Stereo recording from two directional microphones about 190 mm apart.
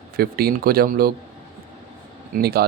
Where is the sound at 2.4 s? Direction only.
55° right (ahead or behind).